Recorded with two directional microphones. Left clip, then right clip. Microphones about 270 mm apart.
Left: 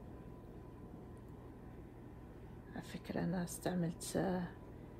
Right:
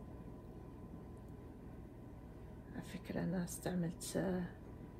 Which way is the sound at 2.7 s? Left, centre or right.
Left.